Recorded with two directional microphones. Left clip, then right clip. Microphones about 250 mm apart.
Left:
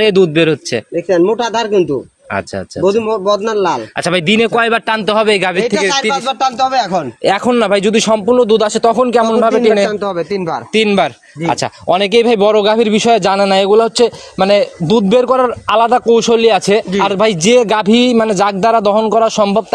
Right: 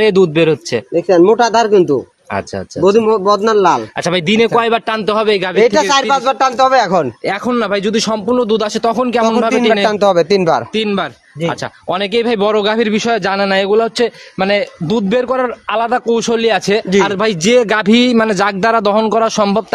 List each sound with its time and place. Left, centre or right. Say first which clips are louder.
0.0 s a man's voice: even; centre
1.3 s speech: right 4 dB; right
4.0 s a man's voice: left 4 dB; centre
5.6 s speech: right 3 dB; right
7.2 s a man's voice: left 4 dB; centre
9.8 s speech: right 6 dB; right
10.7 s speech: left 5 dB; left
12.4 s a man's voice: left 3 dB; centre